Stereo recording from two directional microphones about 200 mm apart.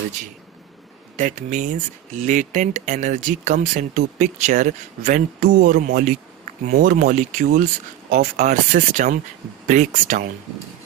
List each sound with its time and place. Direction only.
1.1 s speech: 40° right (ahead or behind)